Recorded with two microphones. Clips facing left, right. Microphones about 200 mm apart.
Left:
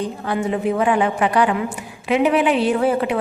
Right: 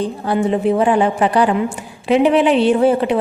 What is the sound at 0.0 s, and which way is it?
A woman's voice, 30° right (ahead or behind).